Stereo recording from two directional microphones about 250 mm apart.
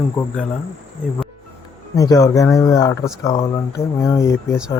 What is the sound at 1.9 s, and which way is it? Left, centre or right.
Speech, centre.